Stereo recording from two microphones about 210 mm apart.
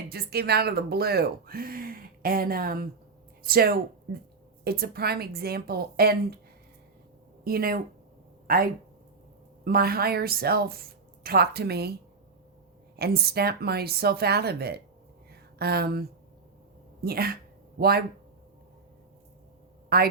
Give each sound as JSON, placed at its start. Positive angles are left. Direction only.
{"t": 0.1, "sound": "speech", "side_deg": -50}
{"t": 7.4, "sound": "speech", "side_deg": -45}
{"t": 13.0, "sound": "speech", "side_deg": -50}
{"t": 19.9, "sound": "speech", "side_deg": -45}